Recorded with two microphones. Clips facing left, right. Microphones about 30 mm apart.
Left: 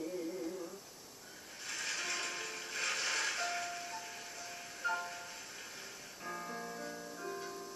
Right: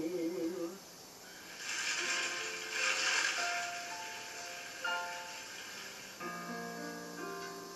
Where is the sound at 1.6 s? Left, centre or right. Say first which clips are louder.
Right 3 dB; right.